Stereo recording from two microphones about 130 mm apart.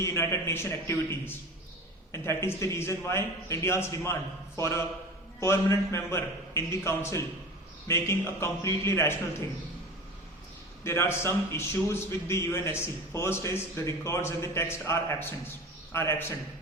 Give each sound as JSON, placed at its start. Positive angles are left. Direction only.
{"t": 0.0, "sound": "a man's voice", "side_deg": 20}
{"t": 10.8, "sound": "a man's voice", "side_deg": 20}